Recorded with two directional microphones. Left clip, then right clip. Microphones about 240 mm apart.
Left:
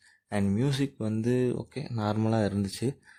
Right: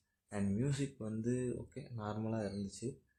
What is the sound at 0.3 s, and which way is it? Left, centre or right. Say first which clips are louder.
Speech: left 10 dB; left.